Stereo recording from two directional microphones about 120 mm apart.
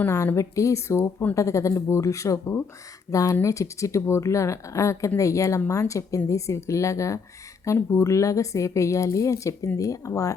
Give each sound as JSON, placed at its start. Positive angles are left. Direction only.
{"t": 0.3, "sound": "speech", "side_deg": 25}